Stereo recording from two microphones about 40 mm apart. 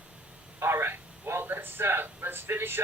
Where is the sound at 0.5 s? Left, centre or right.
Right.